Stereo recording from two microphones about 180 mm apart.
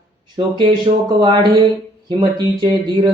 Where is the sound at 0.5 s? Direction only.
25° right (ahead or behind).